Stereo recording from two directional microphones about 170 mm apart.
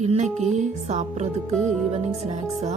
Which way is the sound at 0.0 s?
40° right (ahead or behind).